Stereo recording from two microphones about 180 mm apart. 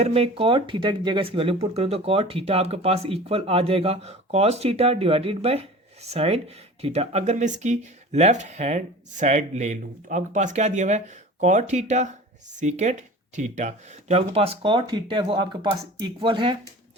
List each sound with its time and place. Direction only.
0.0 s speech: 35° right (ahead or behind)